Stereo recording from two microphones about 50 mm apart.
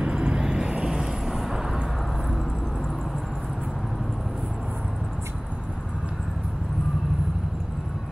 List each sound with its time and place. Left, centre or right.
0.0 s vehicle: right